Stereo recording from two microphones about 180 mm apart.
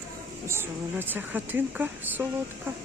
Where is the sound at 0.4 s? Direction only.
15° right (ahead or behind).